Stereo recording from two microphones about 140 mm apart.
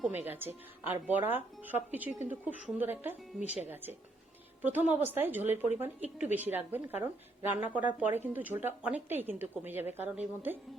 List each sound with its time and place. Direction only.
0.0 s a woman's voice: 15° right (ahead or behind)